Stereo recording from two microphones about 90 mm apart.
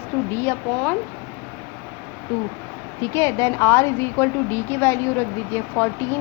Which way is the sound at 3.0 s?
35° left (ahead or behind).